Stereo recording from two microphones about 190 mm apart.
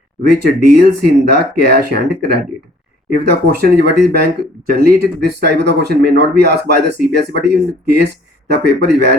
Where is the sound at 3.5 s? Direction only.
55° right (ahead or behind).